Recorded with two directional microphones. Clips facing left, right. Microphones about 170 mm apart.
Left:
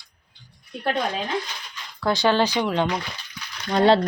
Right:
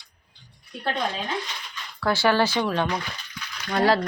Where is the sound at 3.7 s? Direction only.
25° left (ahead or behind).